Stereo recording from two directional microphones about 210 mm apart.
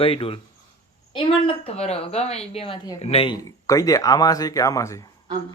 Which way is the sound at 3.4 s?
15° left (ahead or behind).